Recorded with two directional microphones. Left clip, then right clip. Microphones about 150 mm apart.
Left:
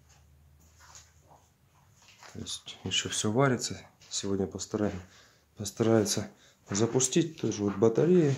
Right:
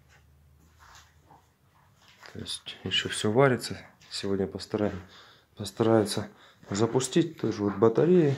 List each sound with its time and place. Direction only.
2.3 s speech: 10° left (ahead or behind)